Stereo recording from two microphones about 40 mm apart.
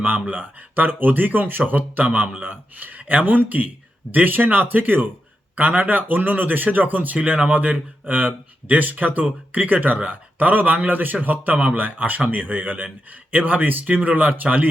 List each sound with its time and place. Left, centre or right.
0.0 s speech: right
13.8 s speech: right